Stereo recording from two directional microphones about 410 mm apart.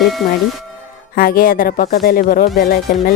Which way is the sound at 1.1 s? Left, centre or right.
Left.